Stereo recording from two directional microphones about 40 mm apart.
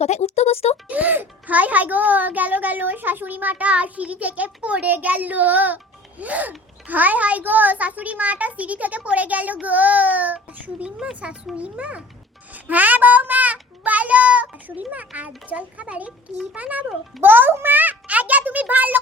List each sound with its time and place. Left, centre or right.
0.9 s a child's voice: right
7.4 s a child's voice: right
17.2 s a child's voice: right
18.1 s a child's voice: right